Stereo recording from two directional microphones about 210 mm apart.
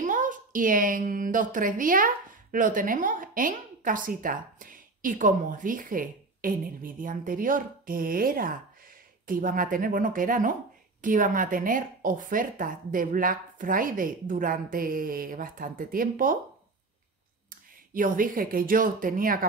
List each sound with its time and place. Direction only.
0.0 s a woman's voice: 40° right (ahead or behind)
17.5 s speech: 40° right (ahead or behind)